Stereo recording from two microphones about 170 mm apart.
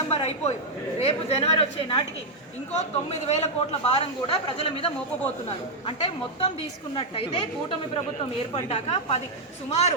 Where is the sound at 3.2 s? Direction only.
40° left (ahead or behind).